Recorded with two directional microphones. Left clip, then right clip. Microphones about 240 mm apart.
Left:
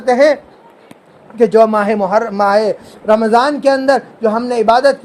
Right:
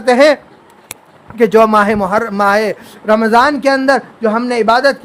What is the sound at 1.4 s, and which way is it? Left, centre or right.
A man's voice, centre.